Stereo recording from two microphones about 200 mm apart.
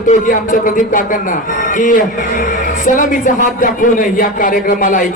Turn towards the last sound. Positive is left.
turn(degrees=40)  # may be behind; listen again after turning